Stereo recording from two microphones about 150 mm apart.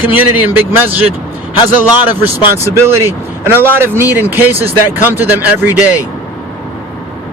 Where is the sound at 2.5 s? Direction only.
15° right (ahead or behind).